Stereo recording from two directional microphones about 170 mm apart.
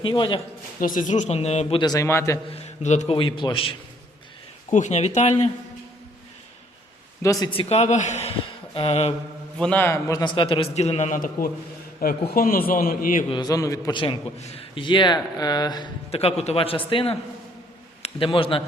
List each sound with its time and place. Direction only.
0.0 s a man's voice: 30° left (ahead or behind)
0.8 s speech: 50° left (ahead or behind)
1.8 s a man's voice: 20° left (ahead or behind)
2.5 s a man's voice: 40° left (ahead or behind)
3.2 s a man's voice: 30° left (ahead or behind)
4.7 s a man's voice: 45° left (ahead or behind)
7.2 s a man's voice: 20° left (ahead or behind)
7.5 s a man's voice: 35° left (ahead or behind)
9.6 s a man's voice: 10° left (ahead or behind); by 13.2 s 55° left (ahead or behind)
13.3 s a man's voice: 20° left (ahead or behind)
14.0 s a man's voice: 35° left (ahead or behind)
16.1 s a man's voice: 40° left (ahead or behind)